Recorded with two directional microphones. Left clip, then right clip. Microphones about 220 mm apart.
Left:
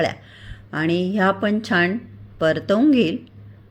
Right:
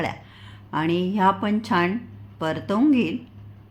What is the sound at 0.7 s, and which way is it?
Speech, 10° left (ahead or behind).